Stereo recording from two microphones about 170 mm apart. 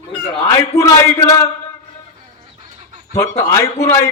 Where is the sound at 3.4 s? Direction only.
15° left (ahead or behind).